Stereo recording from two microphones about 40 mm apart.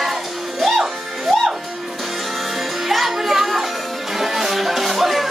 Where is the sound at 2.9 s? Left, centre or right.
Centre.